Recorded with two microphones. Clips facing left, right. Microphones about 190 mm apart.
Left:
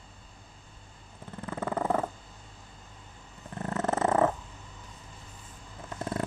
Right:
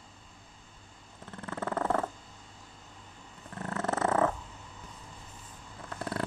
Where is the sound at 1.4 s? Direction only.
10° left (ahead or behind).